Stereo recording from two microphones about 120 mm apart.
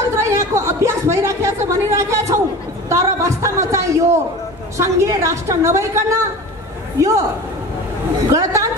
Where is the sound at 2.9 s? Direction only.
25° right (ahead or behind).